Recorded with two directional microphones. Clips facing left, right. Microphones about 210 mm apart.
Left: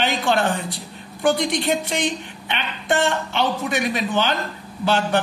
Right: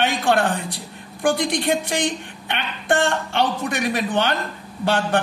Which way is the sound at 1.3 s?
55° right (ahead or behind).